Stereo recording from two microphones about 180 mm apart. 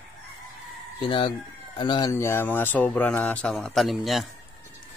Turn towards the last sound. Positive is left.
turn(degrees=0)  # may be behind; listen again after turning